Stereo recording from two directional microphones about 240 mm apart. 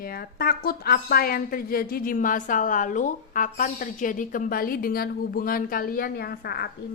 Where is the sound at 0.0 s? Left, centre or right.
Left.